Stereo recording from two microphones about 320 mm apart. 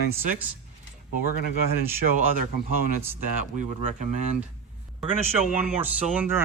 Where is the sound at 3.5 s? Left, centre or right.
Right.